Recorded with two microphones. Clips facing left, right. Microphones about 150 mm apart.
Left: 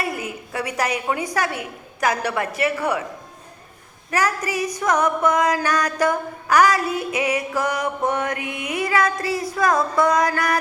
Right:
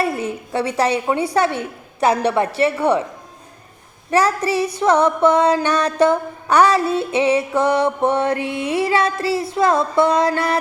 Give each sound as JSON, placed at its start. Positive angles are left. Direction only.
{"t": 0.0, "sound": "a woman's voice", "side_deg": -30}
{"t": 1.1, "sound": "female singing", "side_deg": -30}
{"t": 4.1, "sound": "female singing", "side_deg": -30}